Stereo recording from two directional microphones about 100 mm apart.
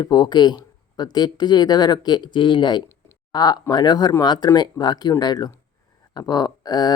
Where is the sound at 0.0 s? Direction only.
45° left (ahead or behind).